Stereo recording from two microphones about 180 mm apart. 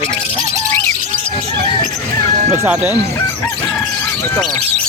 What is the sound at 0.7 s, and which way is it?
Music, 15° left (ahead or behind).